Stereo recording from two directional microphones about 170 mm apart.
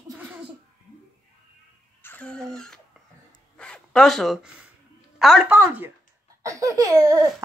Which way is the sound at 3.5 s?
5° left (ahead or behind).